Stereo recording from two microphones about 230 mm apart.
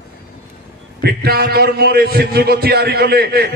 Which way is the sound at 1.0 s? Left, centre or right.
Right.